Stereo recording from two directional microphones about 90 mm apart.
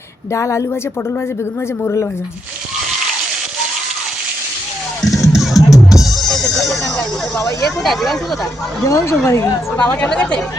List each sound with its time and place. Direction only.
0.3 s speech: 35° left (ahead or behind)
1.8 s speech: 30° left (ahead or behind)
5.1 s music: 5° right (ahead or behind)
7.9 s speech: centre (ahead or behind)
8.8 s speech: 35° left (ahead or behind)
9.7 s speech: 15° left (ahead or behind)